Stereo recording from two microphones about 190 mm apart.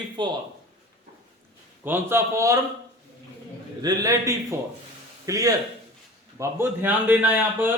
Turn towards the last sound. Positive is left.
turn(degrees=-10)  # may be behind; listen again after turning